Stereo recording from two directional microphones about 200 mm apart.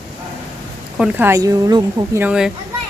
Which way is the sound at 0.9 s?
5° right (ahead or behind).